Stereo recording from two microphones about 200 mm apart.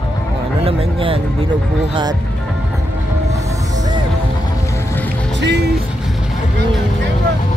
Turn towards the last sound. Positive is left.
turn(degrees=-55)  # may be behind; listen again after turning